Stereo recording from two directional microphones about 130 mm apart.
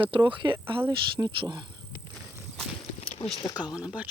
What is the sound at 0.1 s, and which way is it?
Speech, 40° right (ahead or behind).